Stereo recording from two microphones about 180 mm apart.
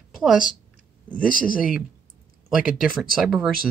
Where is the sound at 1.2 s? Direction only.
50° left (ahead or behind).